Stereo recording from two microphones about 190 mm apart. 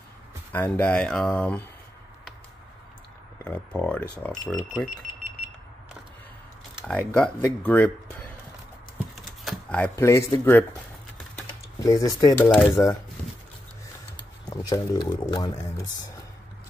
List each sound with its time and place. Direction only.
0.5 s speech: 10° left (ahead or behind)
3.4 s speech: 5° left (ahead or behind)
6.7 s speech: 5° left (ahead or behind)
9.4 s speech: 5° left (ahead or behind)
11.8 s speech: 15° left (ahead or behind)
14.5 s speech: 20° left (ahead or behind)